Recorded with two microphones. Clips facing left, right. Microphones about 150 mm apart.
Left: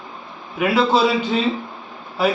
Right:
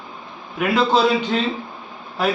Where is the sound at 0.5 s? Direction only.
5° left (ahead or behind).